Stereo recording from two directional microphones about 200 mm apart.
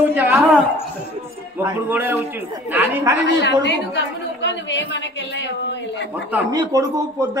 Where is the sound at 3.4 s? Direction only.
60° left (ahead or behind).